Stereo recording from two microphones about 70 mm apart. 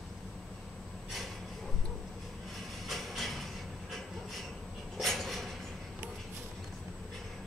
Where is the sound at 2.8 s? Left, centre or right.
Centre.